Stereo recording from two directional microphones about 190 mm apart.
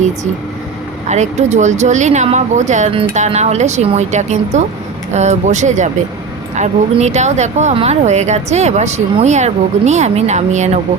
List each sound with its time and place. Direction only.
1.0 s speech: 35° right (ahead or behind)